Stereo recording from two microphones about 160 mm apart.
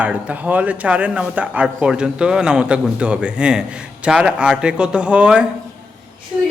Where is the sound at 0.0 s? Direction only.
10° right (ahead or behind).